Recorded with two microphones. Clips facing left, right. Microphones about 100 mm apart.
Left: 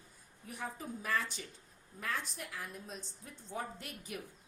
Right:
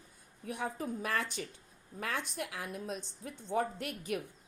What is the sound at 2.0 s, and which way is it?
A woman's voice, 80° right.